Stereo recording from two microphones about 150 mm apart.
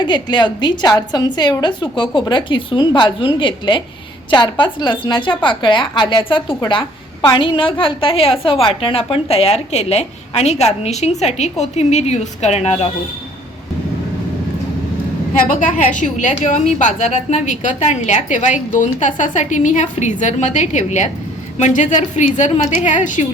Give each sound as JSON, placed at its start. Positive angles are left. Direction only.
{"t": 0.0, "sound": "a woman's voice", "side_deg": 30}
{"t": 15.4, "sound": "a woman's voice", "side_deg": 60}